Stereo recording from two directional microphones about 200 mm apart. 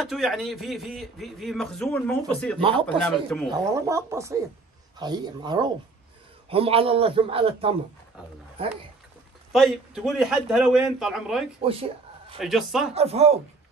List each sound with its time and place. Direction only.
0.0 s speech: centre (ahead or behind)
2.6 s a man's voice: 25° right (ahead or behind)
3.1 s speech: 5° left (ahead or behind)
3.4 s a man's voice: 15° right (ahead or behind)
9.5 s speech: centre (ahead or behind)
11.6 s a sound: 30° right (ahead or behind)
12.4 s speech: centre (ahead or behind)
12.9 s speech: 30° right (ahead or behind)